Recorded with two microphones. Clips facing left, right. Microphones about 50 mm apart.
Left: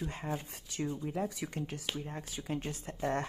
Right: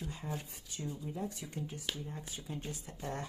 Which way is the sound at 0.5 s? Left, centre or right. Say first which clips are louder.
Left 7 dB; left.